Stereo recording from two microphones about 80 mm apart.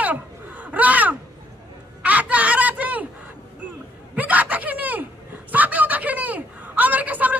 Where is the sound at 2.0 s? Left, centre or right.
Centre.